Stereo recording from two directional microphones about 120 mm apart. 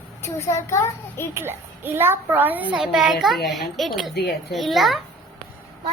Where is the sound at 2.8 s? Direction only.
5° right (ahead or behind).